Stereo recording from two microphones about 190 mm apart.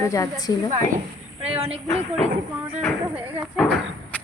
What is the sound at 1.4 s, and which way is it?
Speech, 30° right (ahead or behind).